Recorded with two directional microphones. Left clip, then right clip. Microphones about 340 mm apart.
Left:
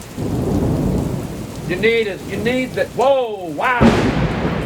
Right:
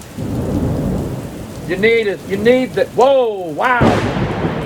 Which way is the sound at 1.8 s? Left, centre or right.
Right.